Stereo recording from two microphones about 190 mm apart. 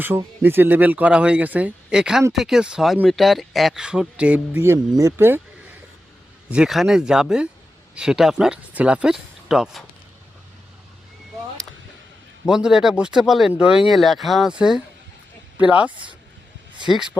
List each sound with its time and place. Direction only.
0.0 s speech: 10° right (ahead or behind)
6.5 s speech: 5° right (ahead or behind)
12.5 s speech: 5° right (ahead or behind)